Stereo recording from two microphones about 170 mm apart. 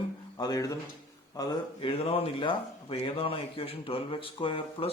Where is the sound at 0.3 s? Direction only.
20° left (ahead or behind).